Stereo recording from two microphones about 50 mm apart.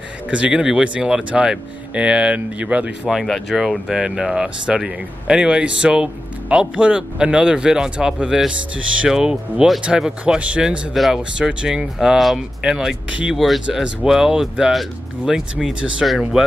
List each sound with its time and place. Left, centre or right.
0.3 s speech: right
3.3 s speech: centre